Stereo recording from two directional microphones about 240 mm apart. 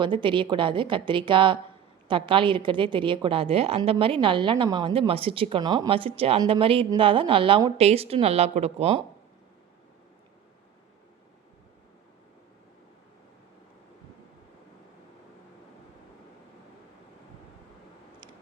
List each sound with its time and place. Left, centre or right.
0.0 s a woman's voice: right